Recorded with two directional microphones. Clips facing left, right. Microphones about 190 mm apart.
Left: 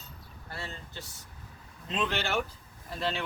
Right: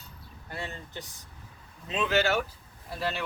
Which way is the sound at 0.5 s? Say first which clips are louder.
Right 3 dB; 15° right (ahead or behind).